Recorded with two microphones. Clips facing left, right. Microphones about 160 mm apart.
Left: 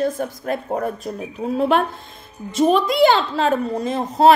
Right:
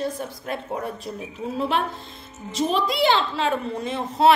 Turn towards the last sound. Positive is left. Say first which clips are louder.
# left 4 dB
turn(degrees=40)  # may be behind; listen again after turning